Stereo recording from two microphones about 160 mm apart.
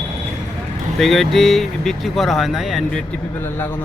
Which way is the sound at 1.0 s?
Centre (ahead or behind).